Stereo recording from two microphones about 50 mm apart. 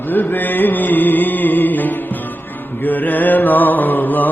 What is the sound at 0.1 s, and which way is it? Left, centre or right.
Music, left.